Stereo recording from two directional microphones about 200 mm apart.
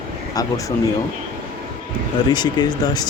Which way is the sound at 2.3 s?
20° left (ahead or behind).